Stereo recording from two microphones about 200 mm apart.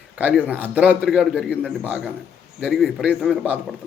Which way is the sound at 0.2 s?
5° right (ahead or behind).